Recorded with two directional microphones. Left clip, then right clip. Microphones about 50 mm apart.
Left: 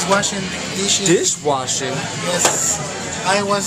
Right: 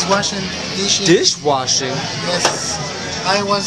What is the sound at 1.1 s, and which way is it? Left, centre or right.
Speech, right.